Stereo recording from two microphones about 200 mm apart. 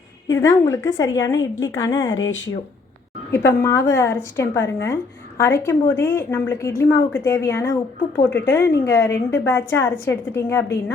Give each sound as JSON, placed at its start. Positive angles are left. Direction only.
{"t": 0.3, "sound": "a woman's voice", "side_deg": 15}
{"t": 2.0, "sound": "speech", "side_deg": 75}
{"t": 3.3, "sound": "a woman's voice", "side_deg": 15}